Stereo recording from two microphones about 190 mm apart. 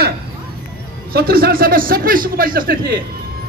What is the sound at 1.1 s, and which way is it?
A man's voice, 50° right (ahead or behind).